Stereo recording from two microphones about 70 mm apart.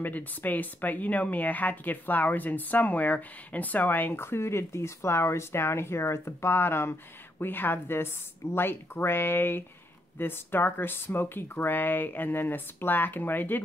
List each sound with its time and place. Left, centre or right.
0.0 s speech: left